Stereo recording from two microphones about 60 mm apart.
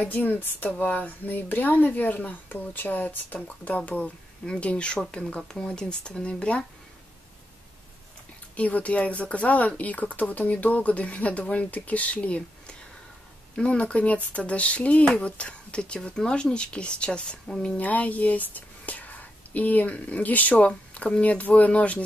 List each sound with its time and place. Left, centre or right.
0.0 s speech: left
8.5 s speech: left
17.7 s speech: left